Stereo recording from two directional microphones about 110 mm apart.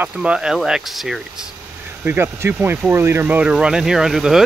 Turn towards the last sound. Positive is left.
turn(degrees=-5)  # may be behind; listen again after turning